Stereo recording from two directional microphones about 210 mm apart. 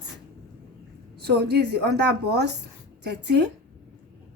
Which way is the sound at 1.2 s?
50° right (ahead or behind).